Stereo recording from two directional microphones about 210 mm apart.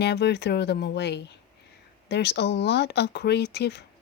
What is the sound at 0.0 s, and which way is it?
Speech, 55° left (ahead or behind).